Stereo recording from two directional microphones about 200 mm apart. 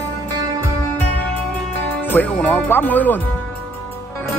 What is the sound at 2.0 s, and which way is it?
Speech, 10° left (ahead or behind).